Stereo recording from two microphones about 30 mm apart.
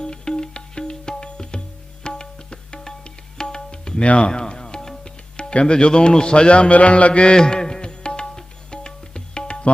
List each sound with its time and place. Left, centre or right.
0.0 s music: left
3.0 s tabla: left
4.0 s speech: left
4.3 s music: left
5.7 s speech: left
7.3 s music: left
8.7 s tabla: left